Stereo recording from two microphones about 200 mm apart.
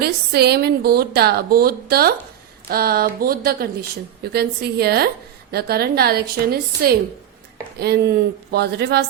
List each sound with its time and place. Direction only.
0.0 s speech: 55° right (ahead or behind)